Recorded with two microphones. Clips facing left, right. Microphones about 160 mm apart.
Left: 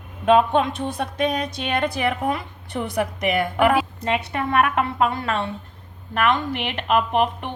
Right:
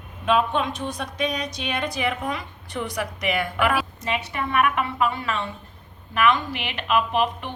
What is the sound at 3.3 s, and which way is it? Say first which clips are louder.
Speech: left 5 dB; 45° left (ahead or behind).